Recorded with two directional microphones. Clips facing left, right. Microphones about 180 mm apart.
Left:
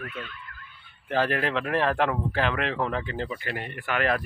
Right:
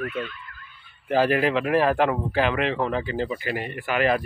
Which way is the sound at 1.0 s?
10° right (ahead or behind).